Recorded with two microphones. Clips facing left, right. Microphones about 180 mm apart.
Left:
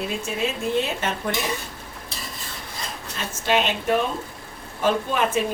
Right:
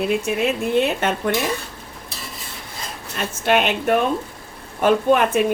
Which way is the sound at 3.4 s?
60° right (ahead or behind).